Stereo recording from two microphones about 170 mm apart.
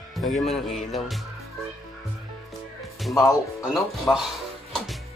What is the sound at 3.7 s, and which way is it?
Music, centre (ahead or behind).